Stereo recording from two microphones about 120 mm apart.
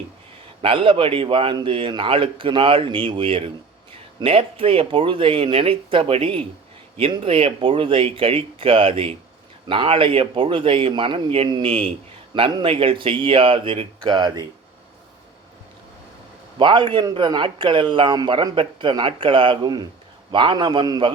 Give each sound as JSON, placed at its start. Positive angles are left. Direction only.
{"t": 0.6, "sound": "a man's voice", "side_deg": -50}
{"t": 11.7, "sound": "a man's voice", "side_deg": -50}
{"t": 16.6, "sound": "a man's voice", "side_deg": -45}